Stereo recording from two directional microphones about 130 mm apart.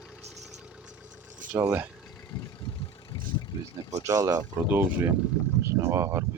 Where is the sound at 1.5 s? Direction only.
15° right (ahead or behind).